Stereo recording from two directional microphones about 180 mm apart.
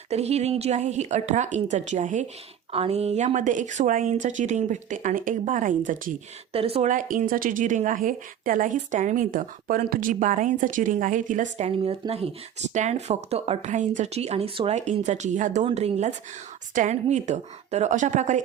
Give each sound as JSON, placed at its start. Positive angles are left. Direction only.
{"t": 0.1, "sound": "a woman's voice", "side_deg": -35}
{"t": 6.5, "sound": "a woman's voice", "side_deg": -30}